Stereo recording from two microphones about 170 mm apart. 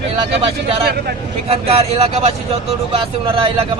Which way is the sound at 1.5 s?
35° right (ahead or behind).